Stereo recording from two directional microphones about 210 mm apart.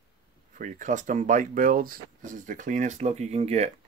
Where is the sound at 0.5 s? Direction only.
40° right (ahead or behind).